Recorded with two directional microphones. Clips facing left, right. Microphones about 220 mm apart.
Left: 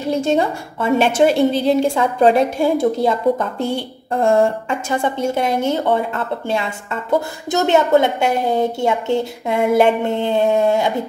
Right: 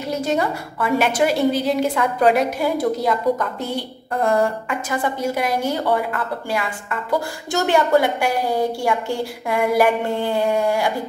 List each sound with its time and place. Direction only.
0.1 s a woman's voice: 25° left (ahead or behind)